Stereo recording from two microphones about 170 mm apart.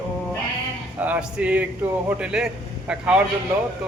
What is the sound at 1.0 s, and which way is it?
A man's voice, 10° right (ahead or behind).